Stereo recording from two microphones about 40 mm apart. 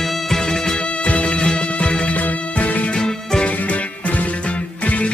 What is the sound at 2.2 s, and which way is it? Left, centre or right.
Music, left.